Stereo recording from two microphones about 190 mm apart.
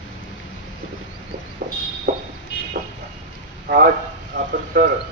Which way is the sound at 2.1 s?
60° right (ahead or behind).